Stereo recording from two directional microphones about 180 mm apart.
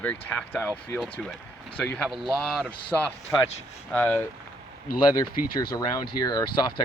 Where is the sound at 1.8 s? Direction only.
5° left (ahead or behind).